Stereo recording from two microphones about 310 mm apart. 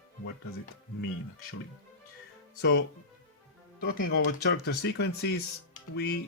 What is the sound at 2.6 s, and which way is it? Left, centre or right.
Speech, left.